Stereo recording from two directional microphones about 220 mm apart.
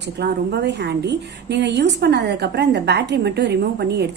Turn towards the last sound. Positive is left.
turn(degrees=-50)  # may be behind; listen again after turning